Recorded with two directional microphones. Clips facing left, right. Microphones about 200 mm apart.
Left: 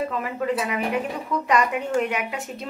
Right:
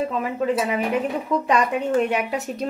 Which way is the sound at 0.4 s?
30° right (ahead or behind).